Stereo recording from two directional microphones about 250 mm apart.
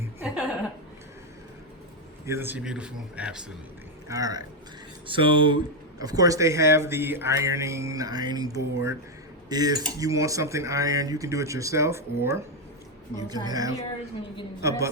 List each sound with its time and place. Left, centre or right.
2.2 s speech: centre
4.1 s speech: centre